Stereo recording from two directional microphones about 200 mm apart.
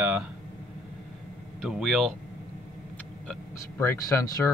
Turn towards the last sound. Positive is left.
turn(degrees=15)  # may be behind; listen again after turning